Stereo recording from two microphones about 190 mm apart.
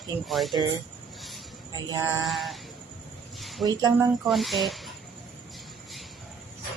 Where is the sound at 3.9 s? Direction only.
Centre (ahead or behind).